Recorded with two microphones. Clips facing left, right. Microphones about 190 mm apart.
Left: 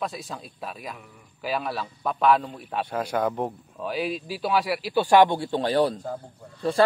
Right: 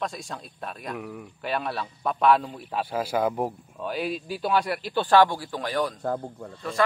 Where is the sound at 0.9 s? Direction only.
90° right.